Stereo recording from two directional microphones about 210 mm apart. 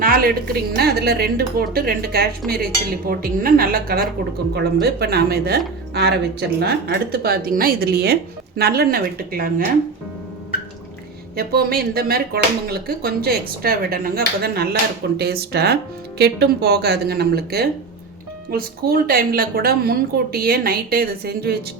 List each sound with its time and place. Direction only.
0.0 s speech: 45° right (ahead or behind)
11.3 s speech: 45° right (ahead or behind)